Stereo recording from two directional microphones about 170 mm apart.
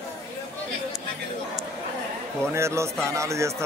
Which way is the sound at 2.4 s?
15° right (ahead or behind).